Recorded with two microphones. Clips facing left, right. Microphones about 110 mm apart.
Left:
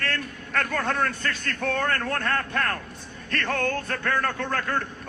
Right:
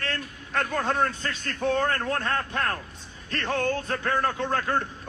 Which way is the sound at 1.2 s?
60° left (ahead or behind).